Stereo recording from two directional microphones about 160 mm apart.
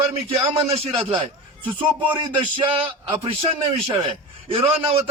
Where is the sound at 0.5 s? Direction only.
40° right (ahead or behind).